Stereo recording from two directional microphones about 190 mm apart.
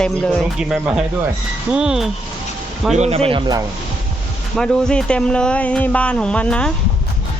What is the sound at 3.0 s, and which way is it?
Speech, 30° right (ahead or behind).